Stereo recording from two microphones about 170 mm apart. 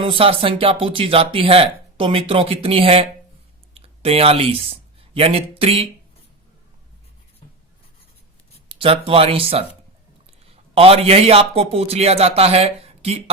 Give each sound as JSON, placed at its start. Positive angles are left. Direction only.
{"t": 0.0, "sound": "speech", "side_deg": -30}
{"t": 8.7, "sound": "a man's voice", "side_deg": -30}